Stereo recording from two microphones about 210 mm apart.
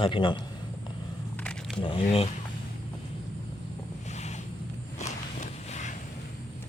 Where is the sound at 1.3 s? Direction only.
5° left (ahead or behind).